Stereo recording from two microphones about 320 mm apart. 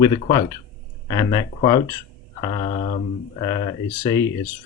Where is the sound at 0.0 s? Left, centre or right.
Centre.